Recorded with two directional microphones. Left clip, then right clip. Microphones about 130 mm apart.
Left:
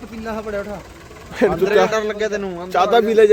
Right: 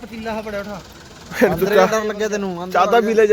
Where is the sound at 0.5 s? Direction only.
45° left (ahead or behind).